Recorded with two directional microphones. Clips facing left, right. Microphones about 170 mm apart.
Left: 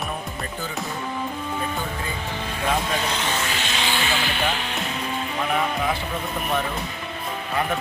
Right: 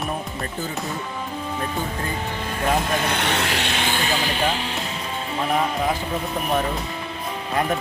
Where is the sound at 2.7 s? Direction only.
55° right (ahead or behind); by 4.6 s 35° right (ahead or behind).